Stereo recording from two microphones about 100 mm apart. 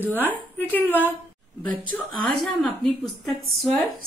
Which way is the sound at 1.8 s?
50° left (ahead or behind).